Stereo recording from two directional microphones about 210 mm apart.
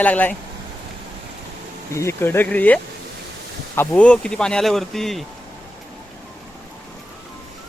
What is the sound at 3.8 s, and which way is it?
Speech, 5° left (ahead or behind).